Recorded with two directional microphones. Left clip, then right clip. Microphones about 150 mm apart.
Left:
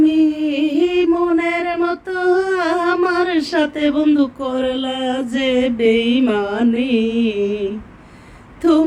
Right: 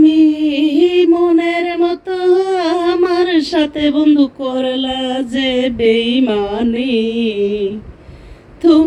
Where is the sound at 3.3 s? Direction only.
40° right (ahead or behind).